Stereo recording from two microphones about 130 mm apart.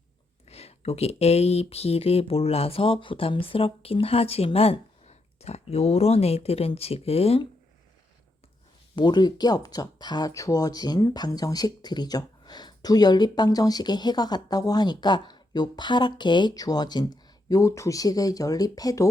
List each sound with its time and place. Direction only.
0.4 s speech: 55° left (ahead or behind)
9.0 s speech: 35° left (ahead or behind)